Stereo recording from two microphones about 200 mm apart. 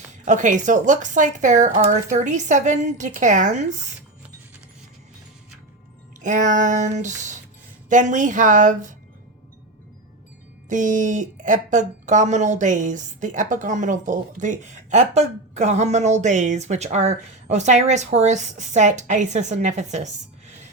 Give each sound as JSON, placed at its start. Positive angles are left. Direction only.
{"t": 0.3, "sound": "speech", "side_deg": -40}
{"t": 6.2, "sound": "speech", "side_deg": -40}
{"t": 10.7, "sound": "speech", "side_deg": -40}